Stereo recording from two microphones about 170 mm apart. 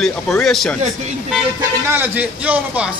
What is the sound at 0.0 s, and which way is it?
Speech, centre (ahead or behind).